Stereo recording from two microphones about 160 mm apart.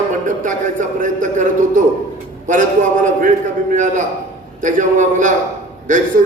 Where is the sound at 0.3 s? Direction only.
55° right (ahead or behind).